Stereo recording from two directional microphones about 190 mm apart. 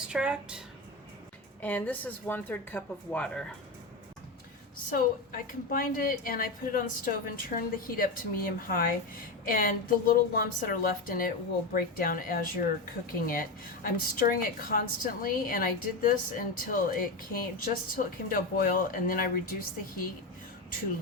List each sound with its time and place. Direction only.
0.1 s a woman's voice: 5° right (ahead or behind)
1.6 s speech: 10° left (ahead or behind)
4.9 s a woman's voice: 50° left (ahead or behind)